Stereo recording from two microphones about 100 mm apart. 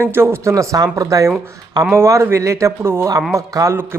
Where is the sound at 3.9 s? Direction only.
25° right (ahead or behind).